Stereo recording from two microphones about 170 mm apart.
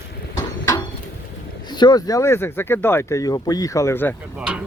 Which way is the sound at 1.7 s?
25° left (ahead or behind).